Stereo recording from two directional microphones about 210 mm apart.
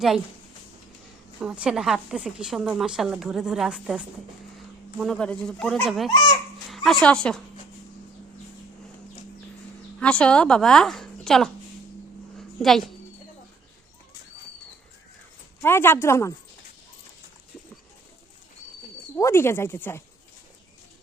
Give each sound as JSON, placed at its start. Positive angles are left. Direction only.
{"t": 1.4, "sound": "a woman's voice", "side_deg": -5}
{"t": 6.1, "sound": "speech", "side_deg": 20}
{"t": 6.7, "sound": "dog", "side_deg": 0}
{"t": 7.0, "sound": "a woman's voice", "side_deg": 5}
{"t": 10.0, "sound": "a woman's voice", "side_deg": 5}
{"t": 12.6, "sound": "a woman's voice", "side_deg": 0}
{"t": 15.6, "sound": "speech", "side_deg": 10}
{"t": 19.1, "sound": "speech", "side_deg": 10}